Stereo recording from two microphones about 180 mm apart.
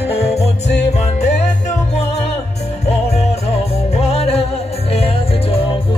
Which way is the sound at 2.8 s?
35° left (ahead or behind).